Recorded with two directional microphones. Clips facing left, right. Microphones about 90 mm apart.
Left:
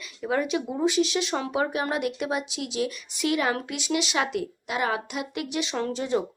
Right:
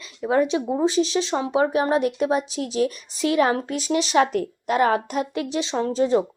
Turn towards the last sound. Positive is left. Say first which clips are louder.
# right 6 dB
turn(degrees=-35)  # may be behind; listen again after turning